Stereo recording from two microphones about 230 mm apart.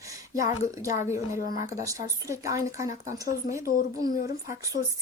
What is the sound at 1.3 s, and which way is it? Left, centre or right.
Speech, left.